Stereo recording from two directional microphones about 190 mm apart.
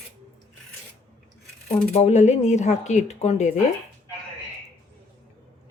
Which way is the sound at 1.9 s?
35° left (ahead or behind).